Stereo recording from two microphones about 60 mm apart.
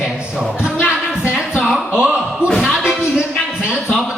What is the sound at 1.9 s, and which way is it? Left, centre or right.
Speech, centre.